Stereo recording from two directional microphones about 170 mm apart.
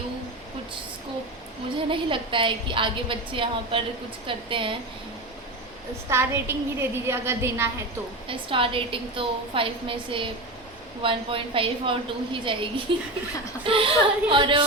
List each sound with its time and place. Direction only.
1.9 s a woman's voice: 30° right (ahead or behind)
6.1 s a woman's voice: 15° right (ahead or behind)
8.3 s a woman's voice: 30° right (ahead or behind)